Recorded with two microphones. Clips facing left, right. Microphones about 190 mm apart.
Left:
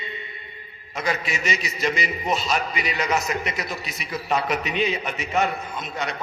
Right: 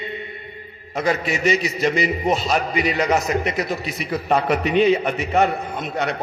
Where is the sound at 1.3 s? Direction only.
55° right (ahead or behind).